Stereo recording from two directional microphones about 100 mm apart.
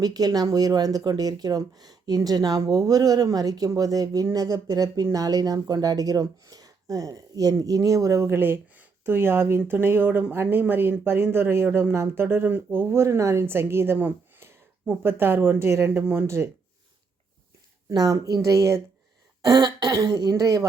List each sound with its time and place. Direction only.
0.0 s speech: 40° right (ahead or behind)
17.8 s speech: 35° right (ahead or behind)
19.5 s throat clearing: 45° right (ahead or behind)
20.0 s speech: 35° right (ahead or behind)